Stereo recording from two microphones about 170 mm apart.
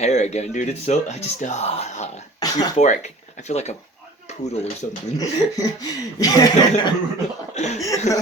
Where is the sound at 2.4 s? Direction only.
20° left (ahead or behind).